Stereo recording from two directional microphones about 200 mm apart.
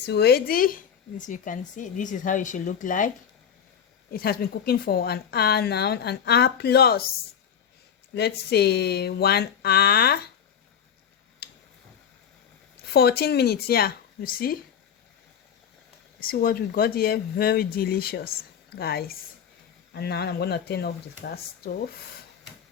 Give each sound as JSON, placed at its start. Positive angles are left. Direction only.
{"t": 0.0, "sound": "speech", "side_deg": 55}
{"t": 4.1, "sound": "a woman's voice", "side_deg": 50}
{"t": 8.1, "sound": "a woman's voice", "side_deg": 55}
{"t": 11.4, "sound": "tick-tock", "side_deg": 50}
{"t": 12.9, "sound": "a woman's voice", "side_deg": 55}
{"t": 16.2, "sound": "a woman's voice", "side_deg": 50}